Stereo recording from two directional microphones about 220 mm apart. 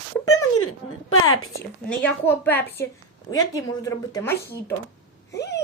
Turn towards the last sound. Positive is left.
turn(degrees=50)  # may be behind; listen again after turning